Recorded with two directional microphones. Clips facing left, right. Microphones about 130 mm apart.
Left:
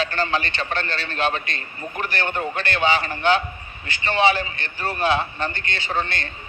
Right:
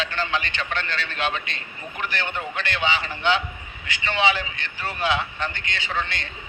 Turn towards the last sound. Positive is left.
turn(degrees=40)  # may be behind; listen again after turning